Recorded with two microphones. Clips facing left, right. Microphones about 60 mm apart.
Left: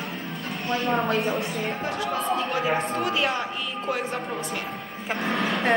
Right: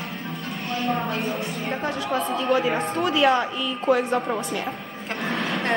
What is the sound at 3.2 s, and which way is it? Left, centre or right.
Speech, right.